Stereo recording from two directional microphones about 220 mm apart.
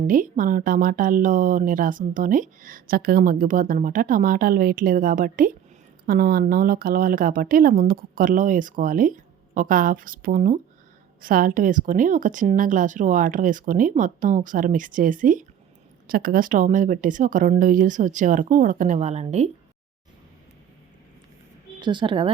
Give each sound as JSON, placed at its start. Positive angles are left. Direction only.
{"t": 0.1, "sound": "speech", "side_deg": -40}
{"t": 21.8, "sound": "a woman's voice", "side_deg": -20}